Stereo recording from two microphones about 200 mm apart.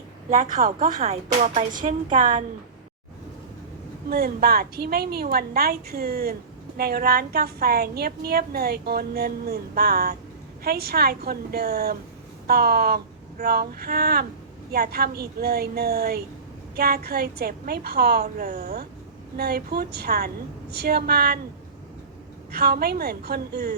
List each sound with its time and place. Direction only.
0.3 s a woman's voice: 40° right (ahead or behind)
4.1 s a woman's voice: 50° right (ahead or behind)
22.5 s a woman's voice: 50° right (ahead or behind)